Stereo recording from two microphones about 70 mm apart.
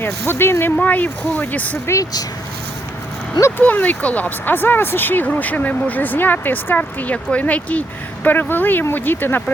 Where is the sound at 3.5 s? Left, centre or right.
Left.